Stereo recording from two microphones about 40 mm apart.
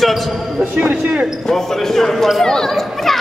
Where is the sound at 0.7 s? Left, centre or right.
Right.